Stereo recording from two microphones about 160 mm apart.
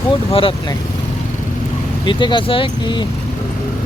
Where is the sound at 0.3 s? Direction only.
35° left (ahead or behind).